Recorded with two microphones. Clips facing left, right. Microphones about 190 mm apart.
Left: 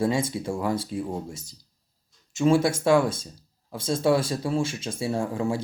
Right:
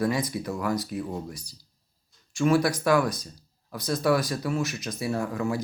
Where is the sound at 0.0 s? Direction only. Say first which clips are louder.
Left 2 dB; 25° left (ahead or behind).